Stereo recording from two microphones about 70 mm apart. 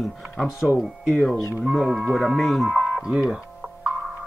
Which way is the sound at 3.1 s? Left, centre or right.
Centre.